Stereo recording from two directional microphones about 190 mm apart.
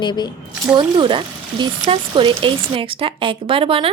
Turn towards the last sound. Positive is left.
turn(degrees=-30)  # may be behind; listen again after turning